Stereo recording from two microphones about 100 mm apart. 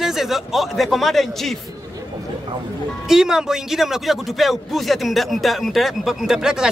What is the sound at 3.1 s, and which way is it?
A man's voice, 5° right (ahead or behind).